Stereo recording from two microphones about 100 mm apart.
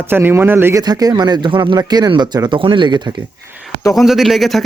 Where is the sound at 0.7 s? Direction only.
40° right (ahead or behind).